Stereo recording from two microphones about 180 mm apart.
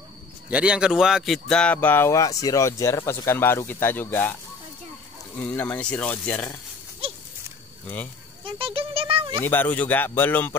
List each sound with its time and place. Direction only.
0.5 s a man's voice: 5° right (ahead or behind); by 4.4 s 10° left (ahead or behind)
5.6 s a man's voice: 10° left (ahead or behind)
7.8 s speech: 10° left (ahead or behind)
8.5 s speech: 30° right (ahead or behind)
9.4 s a man's voice: 10° left (ahead or behind)